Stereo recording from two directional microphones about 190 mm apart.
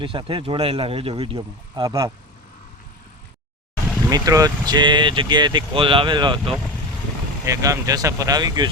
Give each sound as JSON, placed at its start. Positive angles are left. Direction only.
{"t": 0.0, "sound": "speech", "side_deg": -25}
{"t": 4.1, "sound": "speech", "side_deg": -20}